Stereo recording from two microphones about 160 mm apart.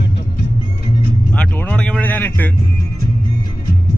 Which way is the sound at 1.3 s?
10° left (ahead or behind).